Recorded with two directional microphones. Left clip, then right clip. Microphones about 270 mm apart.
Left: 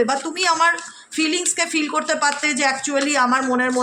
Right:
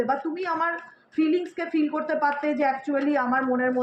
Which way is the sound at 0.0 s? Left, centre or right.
Left.